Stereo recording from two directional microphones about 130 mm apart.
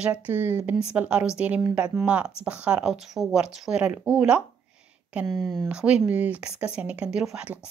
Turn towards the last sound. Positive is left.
turn(degrees=-10)  # may be behind; listen again after turning